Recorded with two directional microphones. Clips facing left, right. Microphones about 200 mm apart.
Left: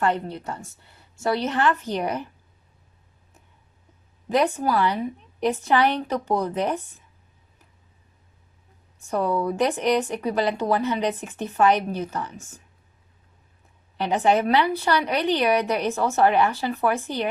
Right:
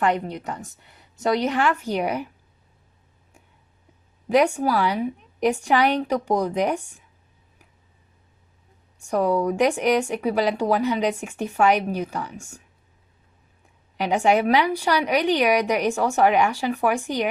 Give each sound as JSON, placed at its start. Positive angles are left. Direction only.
{"t": 0.0, "sound": "a woman's voice", "side_deg": -15}
{"t": 4.3, "sound": "a woman's voice", "side_deg": -10}
{"t": 9.0, "sound": "a woman's voice", "side_deg": -15}
{"t": 13.9, "sound": "a woman's voice", "side_deg": -10}